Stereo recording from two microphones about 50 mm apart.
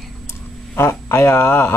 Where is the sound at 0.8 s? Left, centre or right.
Left.